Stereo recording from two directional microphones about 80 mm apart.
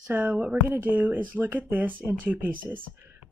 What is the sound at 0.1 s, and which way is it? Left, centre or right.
Speech, right.